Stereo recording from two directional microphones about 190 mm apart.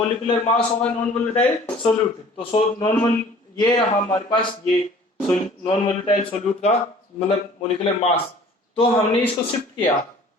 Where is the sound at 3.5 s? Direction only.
25° left (ahead or behind).